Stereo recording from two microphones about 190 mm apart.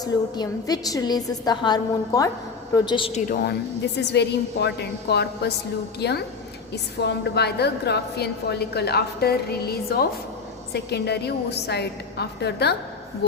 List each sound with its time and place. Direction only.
0.0 s a woman's voice: 20° left (ahead or behind)
3.9 s a woman's voice: 65° left (ahead or behind)